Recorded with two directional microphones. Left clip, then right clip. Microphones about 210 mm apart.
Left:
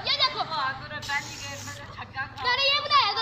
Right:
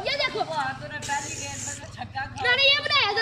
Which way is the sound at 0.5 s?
60° right (ahead or behind).